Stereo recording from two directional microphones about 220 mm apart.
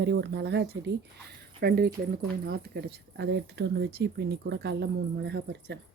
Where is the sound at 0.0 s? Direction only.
50° right (ahead or behind).